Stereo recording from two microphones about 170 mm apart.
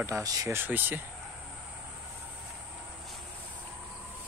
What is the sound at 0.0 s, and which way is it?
Speech, 20° right (ahead or behind).